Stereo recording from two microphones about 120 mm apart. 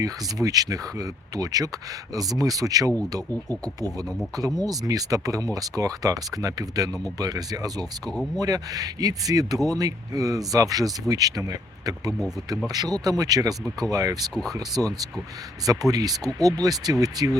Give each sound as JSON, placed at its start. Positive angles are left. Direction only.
{"t": 0.0, "sound": "speech", "side_deg": -30}